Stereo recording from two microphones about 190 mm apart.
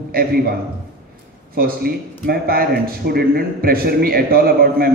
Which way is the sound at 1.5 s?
50° right (ahead or behind).